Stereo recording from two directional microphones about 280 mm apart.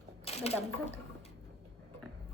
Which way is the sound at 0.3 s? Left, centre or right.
Left.